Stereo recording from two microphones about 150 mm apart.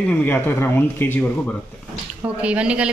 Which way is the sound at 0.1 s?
15° left (ahead or behind).